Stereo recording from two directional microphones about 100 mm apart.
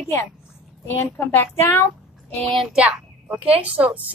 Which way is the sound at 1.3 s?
25° left (ahead or behind).